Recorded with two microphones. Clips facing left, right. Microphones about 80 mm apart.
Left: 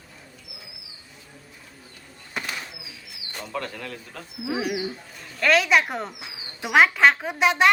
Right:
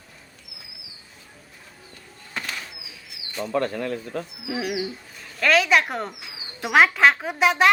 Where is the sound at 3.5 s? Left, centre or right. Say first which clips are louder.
Right 8 dB; right.